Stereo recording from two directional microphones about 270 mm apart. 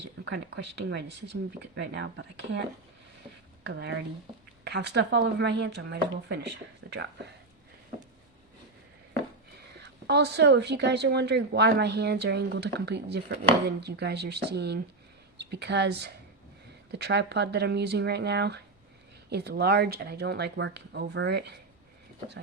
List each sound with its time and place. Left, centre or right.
0.3 s speech: right
3.6 s speech: right
6.8 s a sound: right
9.7 s speech: right